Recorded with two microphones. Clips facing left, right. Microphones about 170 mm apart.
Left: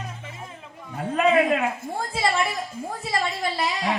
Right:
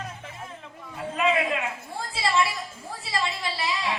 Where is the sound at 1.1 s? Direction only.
40° left (ahead or behind).